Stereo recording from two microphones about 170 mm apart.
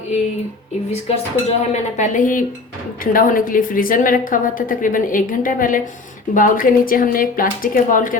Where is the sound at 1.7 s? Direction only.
45° left (ahead or behind).